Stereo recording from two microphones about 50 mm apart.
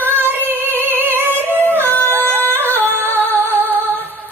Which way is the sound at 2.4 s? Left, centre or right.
Right.